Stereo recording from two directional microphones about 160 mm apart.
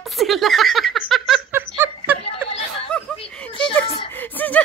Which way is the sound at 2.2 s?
40° left (ahead or behind).